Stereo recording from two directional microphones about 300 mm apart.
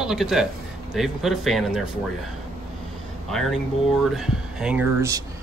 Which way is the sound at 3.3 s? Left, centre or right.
Centre.